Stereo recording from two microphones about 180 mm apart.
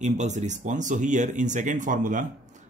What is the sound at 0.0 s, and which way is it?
Speech, 40° right (ahead or behind).